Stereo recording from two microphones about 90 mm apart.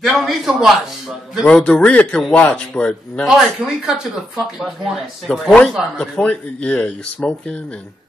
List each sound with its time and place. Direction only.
0.0 s speech: 5° right (ahead or behind)
1.4 s speech: 10° left (ahead or behind)
3.3 s speech: 5° right (ahead or behind)
5.9 s speech: 10° left (ahead or behind)